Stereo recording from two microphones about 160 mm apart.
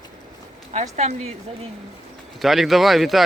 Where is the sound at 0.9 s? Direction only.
45° right (ahead or behind).